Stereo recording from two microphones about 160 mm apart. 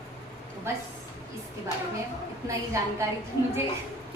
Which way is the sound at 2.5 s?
20° right (ahead or behind).